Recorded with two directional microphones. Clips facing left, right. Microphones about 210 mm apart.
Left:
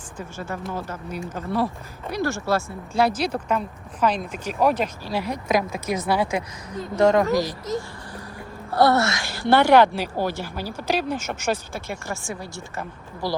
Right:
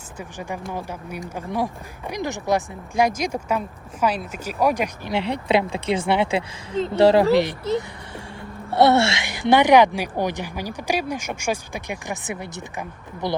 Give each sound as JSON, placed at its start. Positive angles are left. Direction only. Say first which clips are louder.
{"t": 0.2, "sound": "speech", "louder": "even", "side_deg": -15}
{"t": 5.1, "sound": "speech", "louder": "right 3 dB", "side_deg": -30}
{"t": 9.2, "sound": "speech", "louder": "right 1 dB", "side_deg": -15}